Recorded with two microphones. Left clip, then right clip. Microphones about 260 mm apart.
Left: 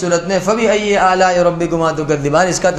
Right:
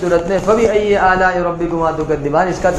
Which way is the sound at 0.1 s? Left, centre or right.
Left.